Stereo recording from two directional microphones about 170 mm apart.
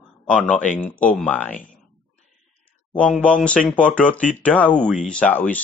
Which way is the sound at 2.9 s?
5° left (ahead or behind).